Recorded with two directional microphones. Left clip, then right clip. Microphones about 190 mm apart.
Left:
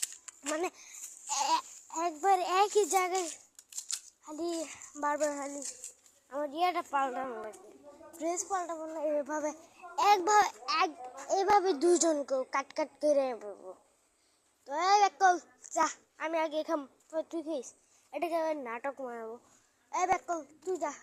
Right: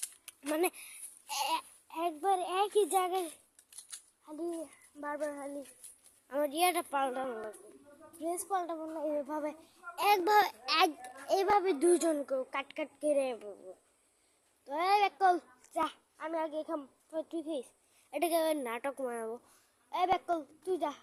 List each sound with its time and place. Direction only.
0.4 s a child's voice: 30° right (ahead or behind)
1.3 s a child's voice: 5° right (ahead or behind)
2.2 s a child's voice: centre (ahead or behind)
3.7 s scissors: 50° left (ahead or behind)
4.3 s a child's voice: 5° left (ahead or behind)
6.2 s a child's voice: 35° right (ahead or behind)
8.4 s speech: 20° right (ahead or behind)
10.7 s a child's voice: 40° right (ahead or behind)
11.4 s a child's voice: 5° right (ahead or behind)
15.7 s a child's voice: centre (ahead or behind); by 16.9 s 15° left (ahead or behind)
17.1 s speech: 5° right (ahead or behind)
18.1 s a child's voice: 25° right (ahead or behind)
19.9 s a child's voice: 20° right (ahead or behind)